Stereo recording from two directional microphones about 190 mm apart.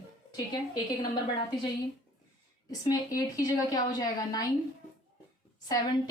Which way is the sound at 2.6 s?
20° left (ahead or behind).